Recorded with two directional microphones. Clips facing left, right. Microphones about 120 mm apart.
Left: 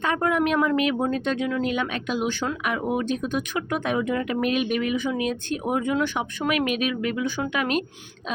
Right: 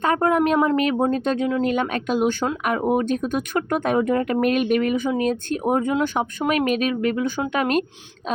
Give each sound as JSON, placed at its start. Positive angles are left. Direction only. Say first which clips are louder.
{"t": 0.0, "sound": "speech", "louder": "right 4 dB", "side_deg": -40}